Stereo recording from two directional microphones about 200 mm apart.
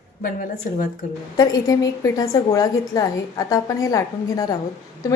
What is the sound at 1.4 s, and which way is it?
A woman's voice, 20° left (ahead or behind).